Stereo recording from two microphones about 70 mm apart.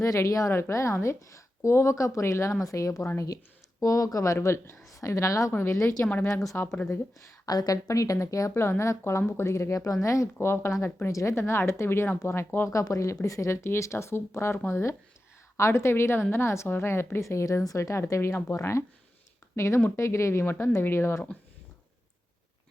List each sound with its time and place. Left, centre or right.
0.0 s speech: left
4.4 s speech: left
4.9 s a woman's voice: left
5.5 s speech: left
6.5 s speech: left
7.4 s speech: left
8.5 s speech: left
12.6 s speech: left